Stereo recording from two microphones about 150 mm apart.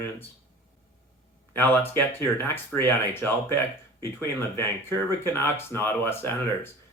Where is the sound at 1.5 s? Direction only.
15° left (ahead or behind).